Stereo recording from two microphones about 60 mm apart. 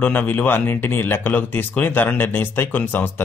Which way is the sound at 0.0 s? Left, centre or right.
Left.